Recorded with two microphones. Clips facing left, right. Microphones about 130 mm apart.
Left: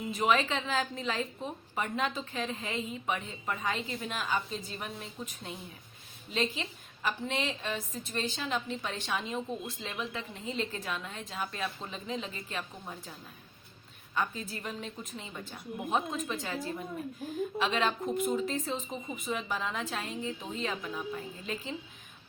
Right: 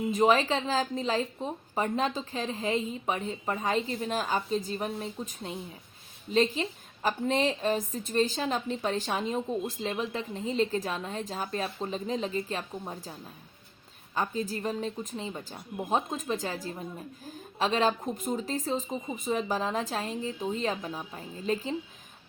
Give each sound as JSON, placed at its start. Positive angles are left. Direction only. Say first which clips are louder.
{"t": 0.1, "sound": "a woman's voice", "louder": "right 4 dB", "side_deg": -35}
{"t": 14.2, "sound": "a woman's voice", "louder": "right 4 dB", "side_deg": -35}